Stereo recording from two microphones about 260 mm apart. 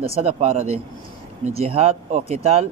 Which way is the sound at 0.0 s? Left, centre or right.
Right.